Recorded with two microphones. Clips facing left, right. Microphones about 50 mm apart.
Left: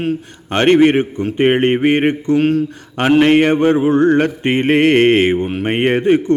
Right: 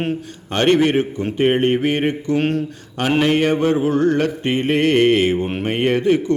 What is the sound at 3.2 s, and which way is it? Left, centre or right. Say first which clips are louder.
Mantra: left 5 dB; left.